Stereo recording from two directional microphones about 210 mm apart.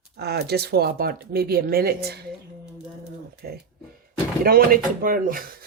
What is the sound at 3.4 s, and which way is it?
Speech, 50° right (ahead or behind).